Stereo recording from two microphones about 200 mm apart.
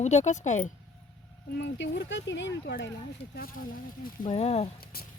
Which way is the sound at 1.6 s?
60° left (ahead or behind).